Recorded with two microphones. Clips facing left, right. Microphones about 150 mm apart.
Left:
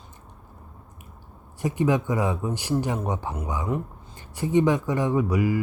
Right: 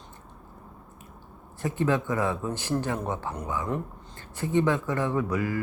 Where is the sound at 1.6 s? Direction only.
15° left (ahead or behind).